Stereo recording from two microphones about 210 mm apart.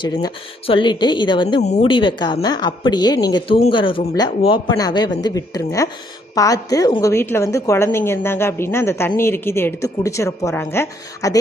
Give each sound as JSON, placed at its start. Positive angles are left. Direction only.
{"t": 0.7, "sound": "a woman's voice", "side_deg": 20}